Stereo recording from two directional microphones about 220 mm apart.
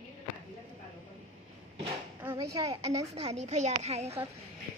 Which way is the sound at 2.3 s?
20° right (ahead or behind).